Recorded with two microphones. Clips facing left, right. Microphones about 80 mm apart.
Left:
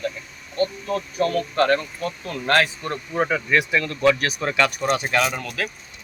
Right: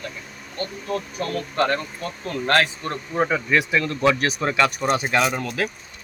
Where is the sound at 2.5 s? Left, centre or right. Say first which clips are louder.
Left 1 dB; centre.